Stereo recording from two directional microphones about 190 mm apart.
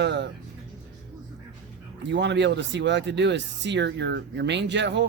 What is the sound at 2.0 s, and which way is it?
Speech, 65° right (ahead or behind).